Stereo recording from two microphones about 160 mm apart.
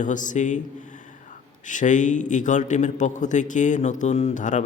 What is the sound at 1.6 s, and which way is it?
A man's voice, 50° left (ahead or behind).